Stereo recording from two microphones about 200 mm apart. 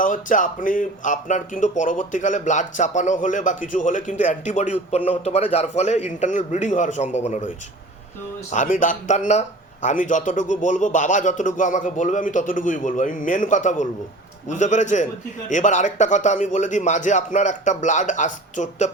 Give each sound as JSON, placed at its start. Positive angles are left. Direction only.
{"t": 0.0, "sound": "speech", "side_deg": 40}